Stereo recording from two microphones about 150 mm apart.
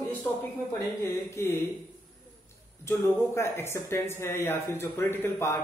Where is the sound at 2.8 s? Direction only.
15° left (ahead or behind).